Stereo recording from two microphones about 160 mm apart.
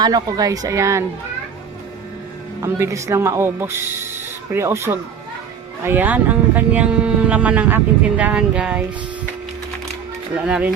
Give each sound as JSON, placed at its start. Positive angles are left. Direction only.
{"t": 0.0, "sound": "speech", "side_deg": -25}
{"t": 2.6, "sound": "speech", "side_deg": -15}
{"t": 10.3, "sound": "speech", "side_deg": -5}